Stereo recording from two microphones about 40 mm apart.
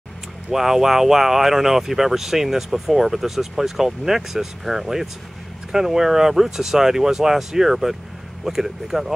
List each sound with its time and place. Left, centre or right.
0.5 s speech: centre